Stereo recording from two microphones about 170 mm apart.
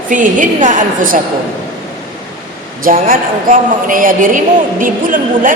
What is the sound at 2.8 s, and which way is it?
A woman's voice, 55° right (ahead or behind).